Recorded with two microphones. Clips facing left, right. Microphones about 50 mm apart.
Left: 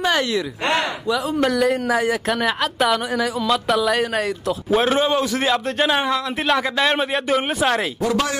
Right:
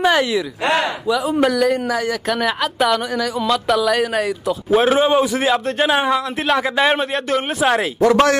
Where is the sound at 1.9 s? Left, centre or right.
Left.